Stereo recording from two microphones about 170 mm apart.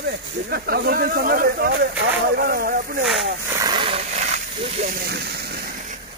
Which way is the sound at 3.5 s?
25° right (ahead or behind).